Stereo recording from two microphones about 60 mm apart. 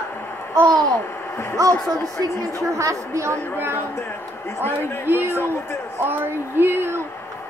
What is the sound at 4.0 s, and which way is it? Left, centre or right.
A man's voice, left.